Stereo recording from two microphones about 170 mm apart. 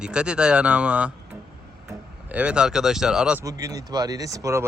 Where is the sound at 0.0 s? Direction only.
5° right (ahead or behind).